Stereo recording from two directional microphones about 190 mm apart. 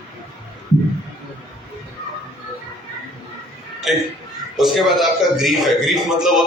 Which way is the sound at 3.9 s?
Centre (ahead or behind).